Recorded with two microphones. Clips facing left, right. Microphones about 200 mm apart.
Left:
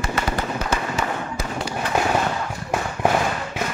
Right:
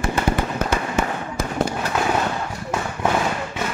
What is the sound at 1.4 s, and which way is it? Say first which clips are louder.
Fireworks: right 5 dB; 50° right (ahead or behind).